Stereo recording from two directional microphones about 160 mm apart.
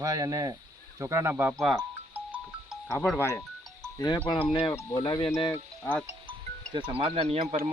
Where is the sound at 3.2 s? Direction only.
20° left (ahead or behind).